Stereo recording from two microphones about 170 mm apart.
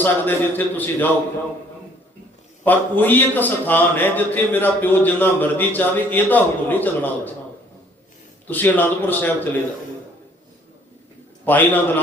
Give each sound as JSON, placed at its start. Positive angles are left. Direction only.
{"t": 0.0, "sound": "a man's voice", "side_deg": 10}
{"t": 2.6, "sound": "a man's voice", "side_deg": 10}
{"t": 8.4, "sound": "a man's voice", "side_deg": 10}
{"t": 11.4, "sound": "a man's voice", "side_deg": 10}